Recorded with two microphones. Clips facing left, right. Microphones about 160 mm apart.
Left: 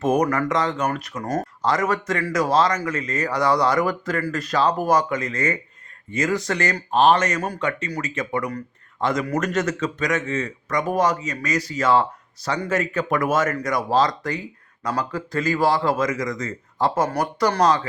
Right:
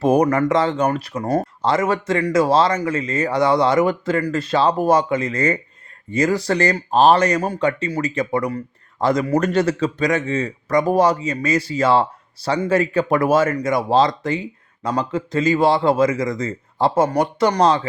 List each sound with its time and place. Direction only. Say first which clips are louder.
0.0 s speech: right 4 dB; 30° right (ahead or behind)